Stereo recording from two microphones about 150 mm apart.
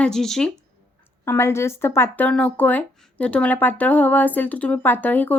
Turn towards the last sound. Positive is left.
turn(degrees=10)  # may be behind; listen again after turning